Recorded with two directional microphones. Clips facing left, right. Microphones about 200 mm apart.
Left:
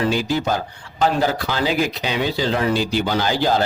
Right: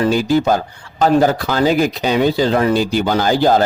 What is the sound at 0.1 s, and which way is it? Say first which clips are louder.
Speech: right 6 dB; 45° right (ahead or behind).